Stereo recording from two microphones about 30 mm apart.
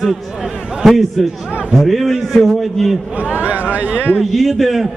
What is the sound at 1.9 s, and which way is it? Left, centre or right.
Speech, centre.